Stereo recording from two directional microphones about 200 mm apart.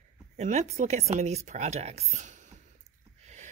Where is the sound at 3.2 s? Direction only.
35° right (ahead or behind).